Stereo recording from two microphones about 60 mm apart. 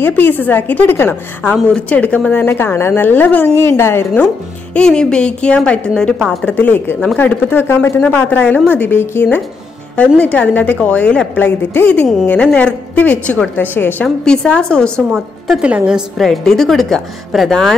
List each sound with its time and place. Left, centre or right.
0.0 s a woman's voice: left
1.7 s a woman's voice: left
2.4 s a woman's voice: left
3.5 s a woman's voice: left
4.7 s a woman's voice: centre
6.4 s a woman's voice: left
14.2 s a woman's voice: centre
15.1 s a woman's voice: centre
15.6 s a woman's voice: centre
16.2 s a woman's voice: centre